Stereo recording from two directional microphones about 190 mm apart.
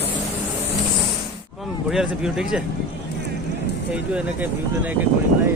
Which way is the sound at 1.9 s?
Centre (ahead or behind).